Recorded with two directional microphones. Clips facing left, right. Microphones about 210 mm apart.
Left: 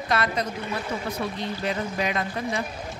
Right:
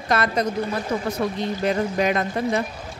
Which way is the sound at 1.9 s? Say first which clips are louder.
Right 5 dB; 50° right (ahead or behind).